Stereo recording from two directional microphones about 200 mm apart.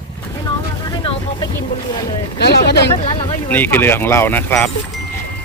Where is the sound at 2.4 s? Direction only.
55° left (ahead or behind).